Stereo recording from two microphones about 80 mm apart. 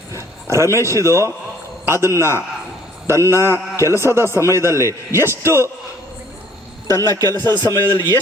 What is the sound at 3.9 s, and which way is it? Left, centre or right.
A man's voice, right.